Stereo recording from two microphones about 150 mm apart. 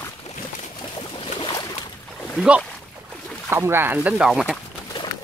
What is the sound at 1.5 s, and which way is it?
Boat, 25° left (ahead or behind).